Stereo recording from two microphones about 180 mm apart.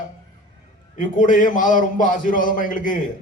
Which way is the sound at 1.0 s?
45° left (ahead or behind).